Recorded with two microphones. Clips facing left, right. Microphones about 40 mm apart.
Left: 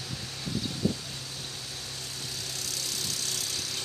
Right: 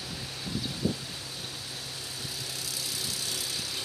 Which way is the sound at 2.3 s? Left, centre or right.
Centre.